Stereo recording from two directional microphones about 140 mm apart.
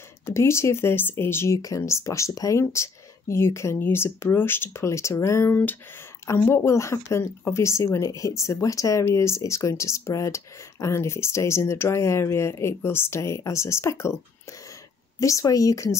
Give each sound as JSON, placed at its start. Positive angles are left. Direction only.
{"t": 0.3, "sound": "speech", "side_deg": 20}
{"t": 15.1, "sound": "speech", "side_deg": 25}